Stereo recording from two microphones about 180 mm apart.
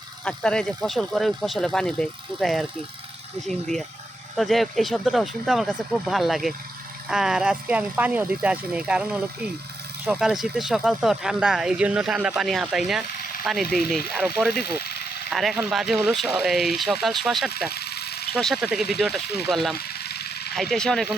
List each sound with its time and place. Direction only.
0.3 s speech: 5° left (ahead or behind)
14.5 s engine: 60° left (ahead or behind)
15.3 s speech: centre (ahead or behind)
17.7 s vehicle: 60° left (ahead or behind)
18.3 s speech: centre (ahead or behind)
19.7 s vehicle: 60° left (ahead or behind)
20.6 s speech: centre (ahead or behind)